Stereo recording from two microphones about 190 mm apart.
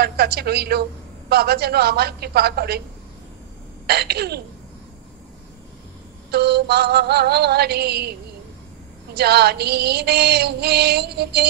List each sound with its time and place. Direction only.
0.0 s female singing: 55° right (ahead or behind)
3.8 s female singing: 55° right (ahead or behind)
6.3 s female singing: 60° right (ahead or behind)